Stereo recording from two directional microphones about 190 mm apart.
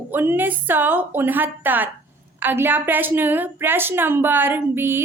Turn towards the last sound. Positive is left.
turn(degrees=-10)  # may be behind; listen again after turning